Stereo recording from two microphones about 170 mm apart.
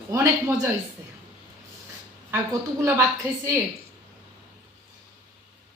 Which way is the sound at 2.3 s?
15° right (ahead or behind).